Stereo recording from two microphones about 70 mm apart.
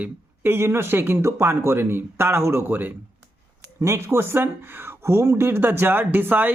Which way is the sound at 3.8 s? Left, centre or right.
Right.